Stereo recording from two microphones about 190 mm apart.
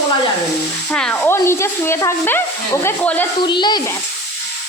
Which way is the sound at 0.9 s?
5° left (ahead or behind).